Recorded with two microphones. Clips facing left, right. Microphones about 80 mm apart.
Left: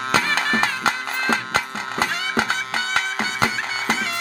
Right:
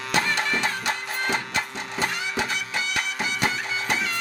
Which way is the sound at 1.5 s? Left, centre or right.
Left.